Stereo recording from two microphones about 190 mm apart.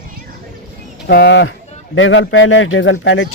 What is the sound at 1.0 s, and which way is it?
Speech, 60° left (ahead or behind).